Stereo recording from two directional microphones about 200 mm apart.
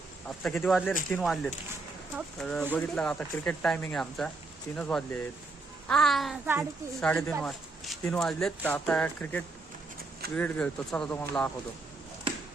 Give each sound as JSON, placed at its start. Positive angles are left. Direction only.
{"t": 0.4, "sound": "speech", "side_deg": 0}